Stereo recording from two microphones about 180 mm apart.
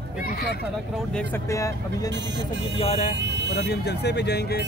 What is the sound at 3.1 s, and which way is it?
Vehicle, 75° right (ahead or behind).